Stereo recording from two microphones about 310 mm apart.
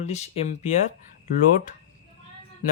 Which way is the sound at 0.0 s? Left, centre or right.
Left.